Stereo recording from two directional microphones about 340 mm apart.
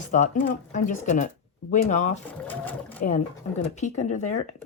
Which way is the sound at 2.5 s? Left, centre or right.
Centre.